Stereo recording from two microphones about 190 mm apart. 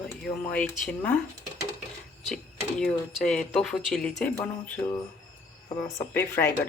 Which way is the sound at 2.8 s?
5° left (ahead or behind).